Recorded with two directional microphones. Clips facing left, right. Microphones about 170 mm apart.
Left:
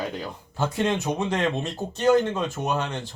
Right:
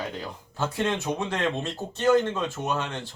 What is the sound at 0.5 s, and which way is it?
Speech, 15° left (ahead or behind).